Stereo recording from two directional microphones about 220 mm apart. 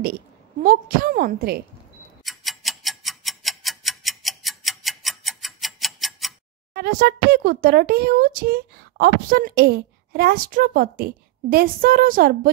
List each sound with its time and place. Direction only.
0.0 s a woman's voice: 40° right (ahead or behind)
2.2 s tick-tock: centre (ahead or behind)
6.7 s speech: 45° right (ahead or behind)